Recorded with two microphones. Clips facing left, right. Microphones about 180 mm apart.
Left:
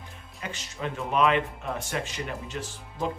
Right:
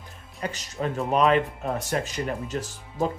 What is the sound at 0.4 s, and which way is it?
Speech, 40° right (ahead or behind).